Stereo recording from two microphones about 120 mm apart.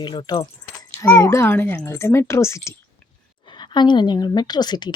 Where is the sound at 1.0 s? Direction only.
25° left (ahead or behind).